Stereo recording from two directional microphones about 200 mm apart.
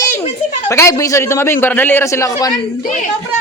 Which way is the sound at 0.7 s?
15° left (ahead or behind).